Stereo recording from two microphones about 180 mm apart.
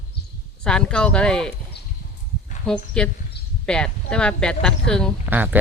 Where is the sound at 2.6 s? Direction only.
5° left (ahead or behind).